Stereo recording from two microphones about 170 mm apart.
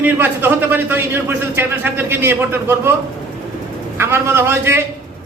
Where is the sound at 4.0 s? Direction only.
15° right (ahead or behind).